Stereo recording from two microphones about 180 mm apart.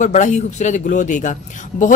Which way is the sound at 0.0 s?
40° left (ahead or behind).